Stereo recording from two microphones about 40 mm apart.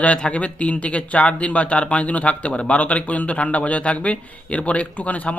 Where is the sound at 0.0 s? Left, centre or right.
Left.